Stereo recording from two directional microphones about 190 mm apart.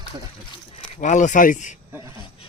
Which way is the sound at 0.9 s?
40° left (ahead or behind).